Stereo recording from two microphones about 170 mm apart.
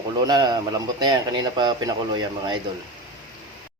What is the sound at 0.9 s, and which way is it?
Speech, 25° right (ahead or behind).